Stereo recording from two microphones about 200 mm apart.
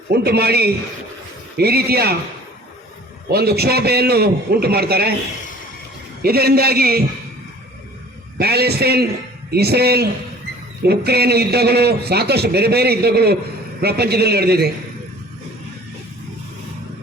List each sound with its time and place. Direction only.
0.1 s a man's voice: 55° right (ahead or behind)
3.2 s a man's voice: 50° right (ahead or behind)
6.2 s a man's voice: 50° right (ahead or behind)
8.4 s a man's voice: 55° right (ahead or behind)